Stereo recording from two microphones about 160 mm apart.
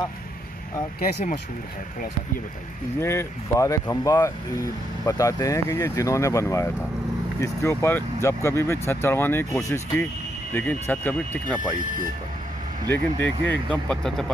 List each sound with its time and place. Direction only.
3.0 s speech: 15° left (ahead or behind)
12.9 s speech: 10° left (ahead or behind)